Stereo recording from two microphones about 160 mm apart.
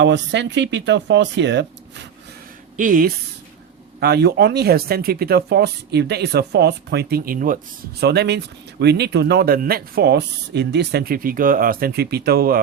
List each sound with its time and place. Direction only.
0.0 s speech: 90° right
2.7 s speech: 55° right (ahead or behind)
4.0 s speech: 90° right; by 12.5 s 70° right (ahead or behind)